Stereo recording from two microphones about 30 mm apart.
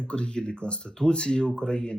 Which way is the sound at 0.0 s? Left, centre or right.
Left.